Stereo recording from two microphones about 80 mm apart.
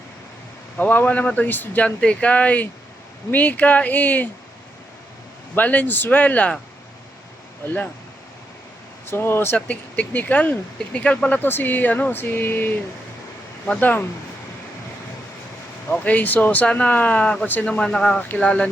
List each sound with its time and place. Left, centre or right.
0.8 s speech: left
5.5 s speech: left
9.0 s speech: left
9.6 s speech: centre
16.0 s speech: left
17.7 s speech: centre